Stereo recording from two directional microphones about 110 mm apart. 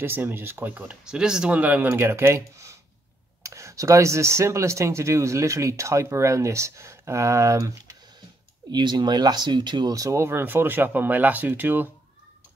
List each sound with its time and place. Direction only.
0.0 s speech: 20° right (ahead or behind)
8.7 s speech: 40° right (ahead or behind); by 11.9 s 15° right (ahead or behind)